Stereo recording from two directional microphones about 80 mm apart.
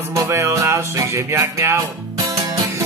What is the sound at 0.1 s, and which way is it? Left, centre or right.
Music, right.